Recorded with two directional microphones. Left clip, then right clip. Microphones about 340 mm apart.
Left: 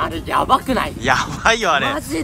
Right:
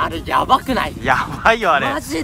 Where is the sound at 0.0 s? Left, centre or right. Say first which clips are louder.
Right 1 dB; centre.